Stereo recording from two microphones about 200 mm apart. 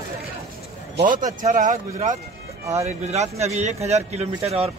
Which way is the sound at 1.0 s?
40° right (ahead or behind).